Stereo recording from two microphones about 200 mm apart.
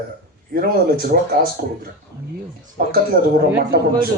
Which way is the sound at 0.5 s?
50° right (ahead or behind).